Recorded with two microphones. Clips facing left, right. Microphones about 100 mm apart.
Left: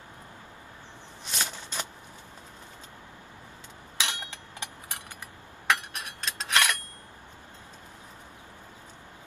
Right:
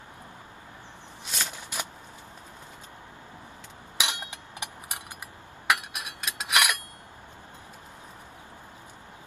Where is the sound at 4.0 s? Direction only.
15° right (ahead or behind).